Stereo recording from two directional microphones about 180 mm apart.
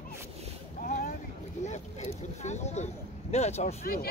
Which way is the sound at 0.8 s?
50° left (ahead or behind).